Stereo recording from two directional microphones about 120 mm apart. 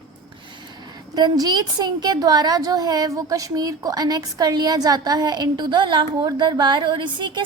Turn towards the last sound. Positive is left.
turn(degrees=-40)  # may be behind; listen again after turning